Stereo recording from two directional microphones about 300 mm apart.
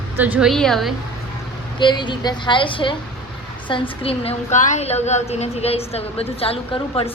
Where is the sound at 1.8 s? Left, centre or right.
Centre.